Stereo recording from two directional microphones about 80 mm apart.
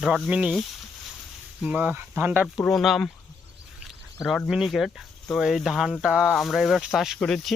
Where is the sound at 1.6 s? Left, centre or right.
Centre.